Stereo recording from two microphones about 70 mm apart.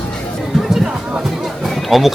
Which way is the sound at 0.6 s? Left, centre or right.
Centre.